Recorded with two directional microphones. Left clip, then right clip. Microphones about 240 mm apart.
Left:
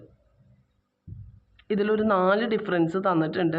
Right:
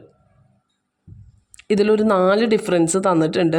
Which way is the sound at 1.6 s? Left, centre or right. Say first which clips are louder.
Right 8 dB; right.